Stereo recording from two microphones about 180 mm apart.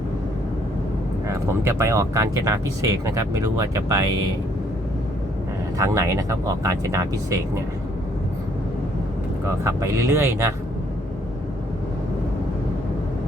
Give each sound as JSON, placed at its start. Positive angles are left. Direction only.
{"t": 1.6, "sound": "speech", "side_deg": -15}
{"t": 5.7, "sound": "speech", "side_deg": -15}
{"t": 9.5, "sound": "speech", "side_deg": -15}